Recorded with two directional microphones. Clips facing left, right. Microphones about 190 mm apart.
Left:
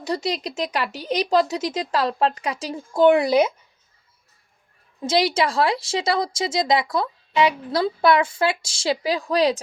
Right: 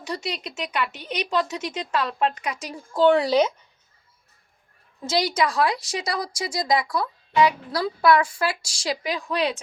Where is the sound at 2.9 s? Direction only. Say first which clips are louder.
Left 2 dB; 15° left (ahead or behind).